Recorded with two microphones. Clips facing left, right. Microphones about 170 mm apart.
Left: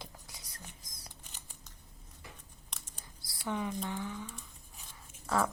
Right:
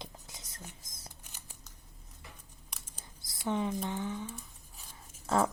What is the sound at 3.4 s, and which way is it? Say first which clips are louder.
Speech: right 3 dB; 25° right (ahead or behind).